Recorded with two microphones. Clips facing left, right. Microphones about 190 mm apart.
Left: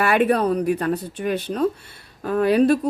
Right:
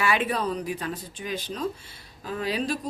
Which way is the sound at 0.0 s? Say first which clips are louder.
Left 7 dB; 60° left (ahead or behind).